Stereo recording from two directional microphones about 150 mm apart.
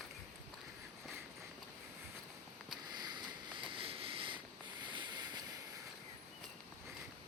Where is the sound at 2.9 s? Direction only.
30° right (ahead or behind).